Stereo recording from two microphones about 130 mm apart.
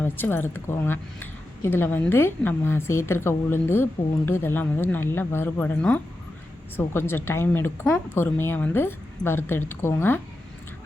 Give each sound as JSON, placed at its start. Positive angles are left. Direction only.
{"t": 0.0, "sound": "speech", "side_deg": 15}